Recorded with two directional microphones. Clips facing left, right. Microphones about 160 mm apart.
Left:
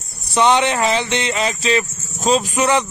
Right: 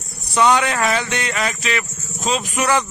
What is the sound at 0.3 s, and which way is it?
Speech, 25° left (ahead or behind).